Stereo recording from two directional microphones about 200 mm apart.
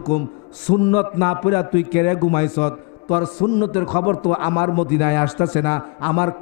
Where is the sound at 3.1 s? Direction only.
30° left (ahead or behind).